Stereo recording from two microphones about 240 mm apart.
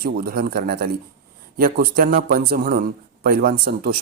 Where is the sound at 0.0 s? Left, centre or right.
Right.